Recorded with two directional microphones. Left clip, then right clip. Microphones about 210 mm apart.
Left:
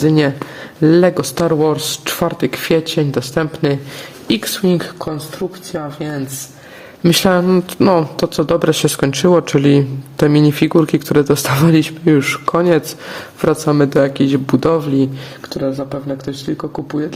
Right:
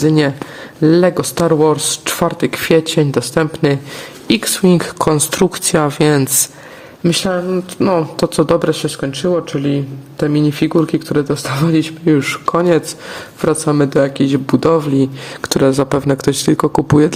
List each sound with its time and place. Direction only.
0.0 s speech: centre (ahead or behind)
4.9 s speech: 30° right (ahead or behind)
7.0 s speech: 10° left (ahead or behind)
8.7 s speech: 10° left (ahead or behind); by 15.1 s 5° right (ahead or behind)
15.4 s speech: 30° right (ahead or behind)